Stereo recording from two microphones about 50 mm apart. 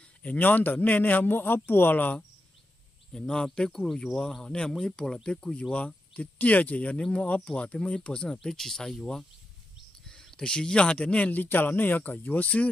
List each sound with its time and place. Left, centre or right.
0.4 s a man's voice: left
3.1 s speech: centre
8.3 s speech: centre
10.0 s speech: centre
11.3 s a man's voice: left